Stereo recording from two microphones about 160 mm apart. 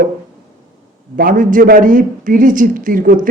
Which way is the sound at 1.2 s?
55° right (ahead or behind).